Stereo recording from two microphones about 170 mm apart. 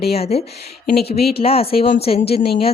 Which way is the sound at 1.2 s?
65° left (ahead or behind).